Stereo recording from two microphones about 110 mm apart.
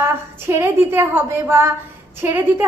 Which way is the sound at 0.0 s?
25° right (ahead or behind).